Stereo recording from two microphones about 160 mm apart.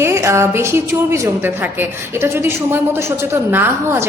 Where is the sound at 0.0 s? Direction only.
15° right (ahead or behind).